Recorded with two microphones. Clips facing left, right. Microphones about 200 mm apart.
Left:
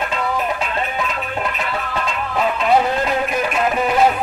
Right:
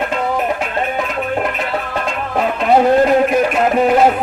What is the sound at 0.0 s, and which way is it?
Music, 55° right (ahead or behind).